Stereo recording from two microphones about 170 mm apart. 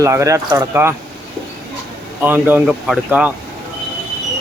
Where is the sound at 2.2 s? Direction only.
10° right (ahead or behind).